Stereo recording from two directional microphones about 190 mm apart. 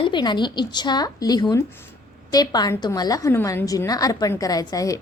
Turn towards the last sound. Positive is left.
turn(degrees=20)  # may be behind; listen again after turning